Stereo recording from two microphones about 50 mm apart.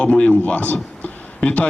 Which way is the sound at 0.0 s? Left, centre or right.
Left.